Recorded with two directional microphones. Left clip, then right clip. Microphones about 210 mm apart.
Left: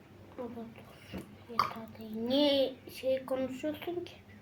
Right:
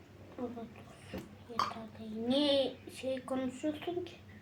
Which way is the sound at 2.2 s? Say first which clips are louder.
Left 2 dB; 15° left (ahead or behind).